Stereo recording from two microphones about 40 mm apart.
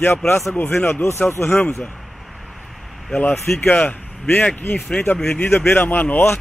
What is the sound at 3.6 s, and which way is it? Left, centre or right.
Speech, left.